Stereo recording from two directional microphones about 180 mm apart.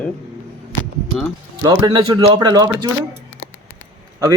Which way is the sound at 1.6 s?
25° right (ahead or behind).